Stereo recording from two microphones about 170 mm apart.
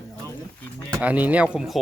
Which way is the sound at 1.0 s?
10° right (ahead or behind).